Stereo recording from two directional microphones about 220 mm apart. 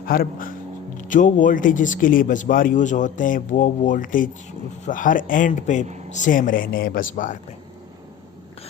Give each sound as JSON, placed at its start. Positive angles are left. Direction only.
{"t": 0.0, "sound": "speech", "side_deg": 40}